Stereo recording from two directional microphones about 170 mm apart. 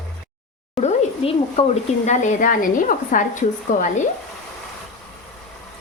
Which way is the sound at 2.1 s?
50° left (ahead or behind).